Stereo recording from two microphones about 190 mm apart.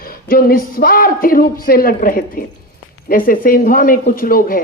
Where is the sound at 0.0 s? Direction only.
50° left (ahead or behind).